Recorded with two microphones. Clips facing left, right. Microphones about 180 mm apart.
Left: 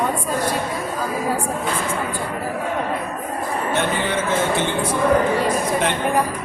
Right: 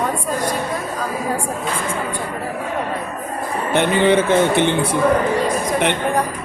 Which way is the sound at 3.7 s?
65° right (ahead or behind).